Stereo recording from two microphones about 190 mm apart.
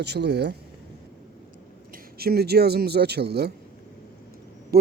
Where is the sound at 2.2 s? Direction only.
55° right (ahead or behind).